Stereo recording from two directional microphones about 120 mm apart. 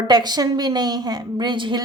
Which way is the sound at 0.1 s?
35° right (ahead or behind).